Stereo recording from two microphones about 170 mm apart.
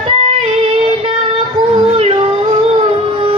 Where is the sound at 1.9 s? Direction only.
30° right (ahead or behind).